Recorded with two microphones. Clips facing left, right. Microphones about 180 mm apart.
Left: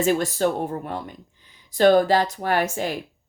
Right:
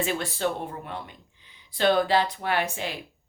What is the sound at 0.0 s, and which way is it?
Speech, 45° left (ahead or behind).